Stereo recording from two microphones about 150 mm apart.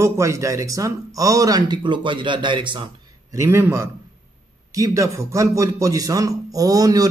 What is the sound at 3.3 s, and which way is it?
A man's voice, 20° right (ahead or behind).